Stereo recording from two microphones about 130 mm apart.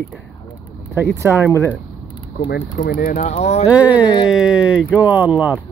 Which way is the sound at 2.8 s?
65° left (ahead or behind).